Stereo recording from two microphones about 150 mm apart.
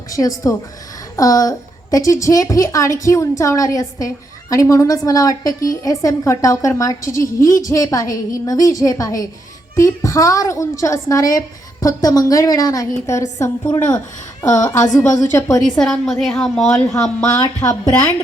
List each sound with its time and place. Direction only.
0.1 s a woman's voice: 25° left (ahead or behind)
15.8 s a woman's voice: 5° left (ahead or behind)
17.3 s a woman's voice: 20° left (ahead or behind)